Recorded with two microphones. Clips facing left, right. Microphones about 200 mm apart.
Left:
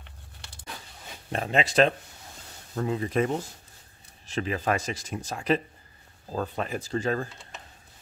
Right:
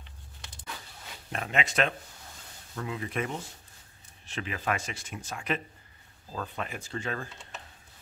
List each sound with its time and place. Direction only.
1.3 s speech: 30° left (ahead or behind)